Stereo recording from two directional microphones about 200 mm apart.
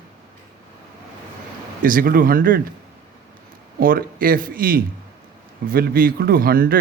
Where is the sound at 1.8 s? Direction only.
45° right (ahead or behind).